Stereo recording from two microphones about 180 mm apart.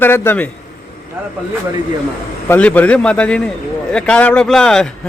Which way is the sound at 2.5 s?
10° left (ahead or behind).